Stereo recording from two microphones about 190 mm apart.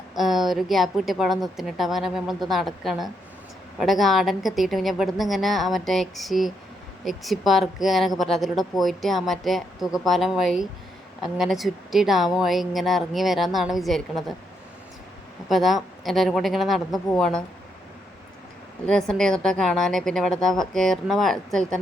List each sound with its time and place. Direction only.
0.1 s speech: centre (ahead or behind)
15.4 s speech: centre (ahead or behind)
18.9 s speech: 5° left (ahead or behind)